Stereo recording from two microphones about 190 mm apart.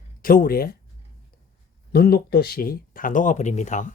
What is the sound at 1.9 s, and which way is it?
Speech, 50° left (ahead or behind).